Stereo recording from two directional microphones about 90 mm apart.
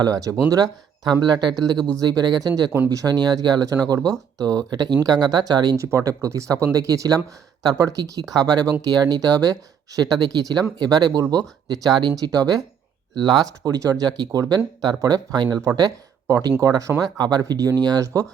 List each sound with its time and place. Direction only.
0.0 s speech: 40° right (ahead or behind)
5.7 s speech: 30° right (ahead or behind)